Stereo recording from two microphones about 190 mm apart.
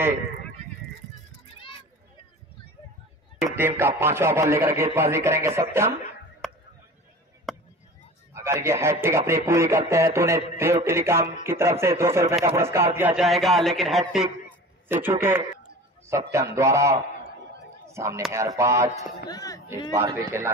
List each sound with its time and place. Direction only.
3.4 s a man's voice: 10° right (ahead or behind)
6.4 s a sound: centre (ahead or behind)
8.3 s a man's voice: 15° right (ahead or behind)
14.9 s a man's voice: 10° right (ahead or behind)
19.2 s speech: 20° left (ahead or behind)
19.7 s a man's voice: 15° right (ahead or behind)